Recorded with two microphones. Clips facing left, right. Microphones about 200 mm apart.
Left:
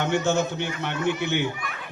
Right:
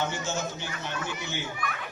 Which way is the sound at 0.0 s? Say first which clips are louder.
Left 8 dB; 65° left (ahead or behind).